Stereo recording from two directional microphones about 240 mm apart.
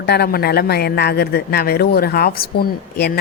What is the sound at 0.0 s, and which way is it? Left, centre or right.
Speech, left.